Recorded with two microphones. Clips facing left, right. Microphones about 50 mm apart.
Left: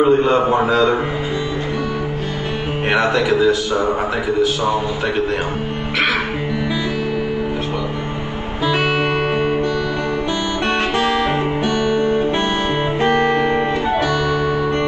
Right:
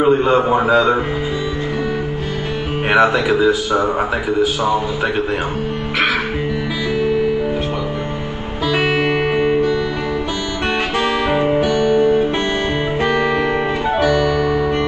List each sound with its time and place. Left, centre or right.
0.0 s a man's voice: centre
2.9 s speech: centre
8.7 s music: centre
11.0 s music: centre
11.7 s music: left
13.0 s music: centre